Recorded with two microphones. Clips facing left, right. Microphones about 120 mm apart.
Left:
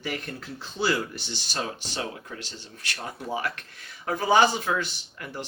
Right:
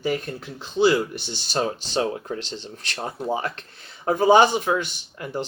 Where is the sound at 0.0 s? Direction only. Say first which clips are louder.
Right 7 dB; 25° right (ahead or behind).